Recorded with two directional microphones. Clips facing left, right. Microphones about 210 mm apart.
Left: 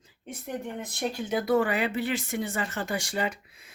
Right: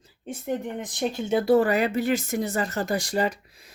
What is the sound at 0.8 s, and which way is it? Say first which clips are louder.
Speech: right 3 dB; 20° right (ahead or behind).